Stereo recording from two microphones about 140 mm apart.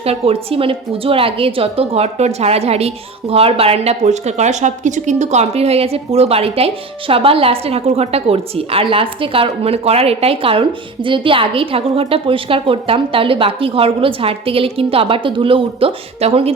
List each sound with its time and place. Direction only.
0.0 s a woman's voice: 45° right (ahead or behind)